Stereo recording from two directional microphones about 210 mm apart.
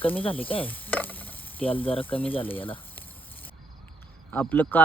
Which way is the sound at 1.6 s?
25° left (ahead or behind).